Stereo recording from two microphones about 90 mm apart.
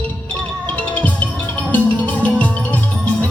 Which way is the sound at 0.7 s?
15° left (ahead or behind).